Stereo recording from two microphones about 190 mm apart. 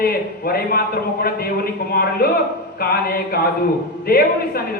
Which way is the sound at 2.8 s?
55° left (ahead or behind).